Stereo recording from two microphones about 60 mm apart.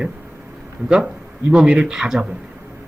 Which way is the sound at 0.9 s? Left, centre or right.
Centre.